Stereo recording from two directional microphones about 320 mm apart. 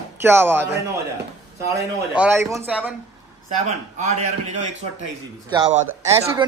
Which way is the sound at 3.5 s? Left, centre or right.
Right.